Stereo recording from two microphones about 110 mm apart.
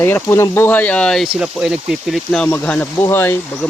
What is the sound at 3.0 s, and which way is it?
Speech, 25° left (ahead or behind).